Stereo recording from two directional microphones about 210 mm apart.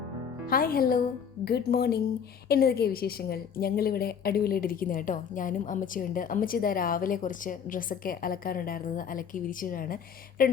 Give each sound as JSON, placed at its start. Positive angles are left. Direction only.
{"t": 0.4, "sound": "a woman's voice", "side_deg": 45}